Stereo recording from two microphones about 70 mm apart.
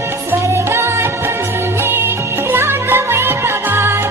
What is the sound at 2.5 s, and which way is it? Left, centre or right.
Music, right.